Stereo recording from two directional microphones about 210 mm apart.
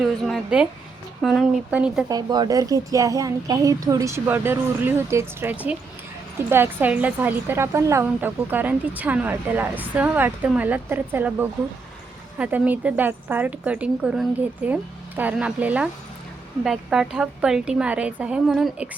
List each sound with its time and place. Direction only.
0.0 s a woman's voice: centre (ahead or behind)
2.0 s a woman's voice: 20° right (ahead or behind); by 18.9 s centre (ahead or behind)